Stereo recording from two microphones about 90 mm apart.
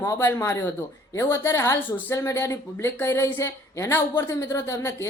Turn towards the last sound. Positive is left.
turn(degrees=30)  # may be behind; listen again after turning